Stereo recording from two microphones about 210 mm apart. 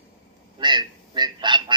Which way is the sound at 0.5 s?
20° right (ahead or behind).